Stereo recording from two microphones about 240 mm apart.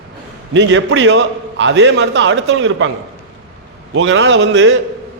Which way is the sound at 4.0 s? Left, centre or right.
Right.